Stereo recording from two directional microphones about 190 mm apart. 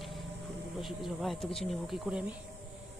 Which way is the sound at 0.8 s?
Centre (ahead or behind).